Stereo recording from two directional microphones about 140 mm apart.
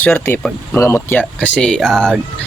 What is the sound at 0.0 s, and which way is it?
Speech, 15° left (ahead or behind).